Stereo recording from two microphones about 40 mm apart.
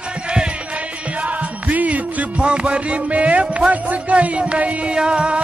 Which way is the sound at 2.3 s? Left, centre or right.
Right.